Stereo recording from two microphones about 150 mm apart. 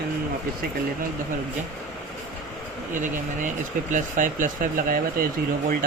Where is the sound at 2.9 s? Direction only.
60° right (ahead or behind).